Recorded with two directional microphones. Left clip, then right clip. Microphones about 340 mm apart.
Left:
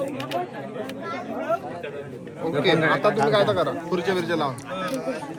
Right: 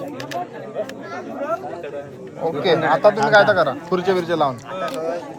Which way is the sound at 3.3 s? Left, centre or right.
Right.